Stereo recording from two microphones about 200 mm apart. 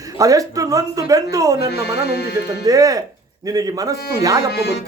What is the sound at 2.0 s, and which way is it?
Speech, 55° left (ahead or behind).